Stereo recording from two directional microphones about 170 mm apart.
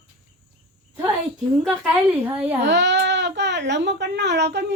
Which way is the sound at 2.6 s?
90° right.